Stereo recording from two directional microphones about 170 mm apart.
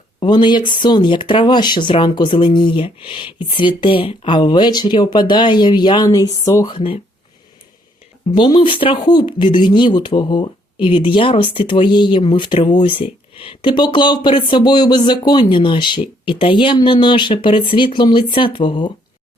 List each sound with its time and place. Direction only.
0.2 s speech: 30° left (ahead or behind)
8.3 s speech: 25° left (ahead or behind)